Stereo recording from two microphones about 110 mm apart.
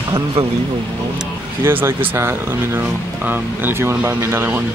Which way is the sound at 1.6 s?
20° right (ahead or behind).